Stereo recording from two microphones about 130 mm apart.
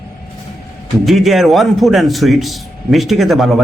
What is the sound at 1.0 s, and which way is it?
A man's voice, centre (ahead or behind).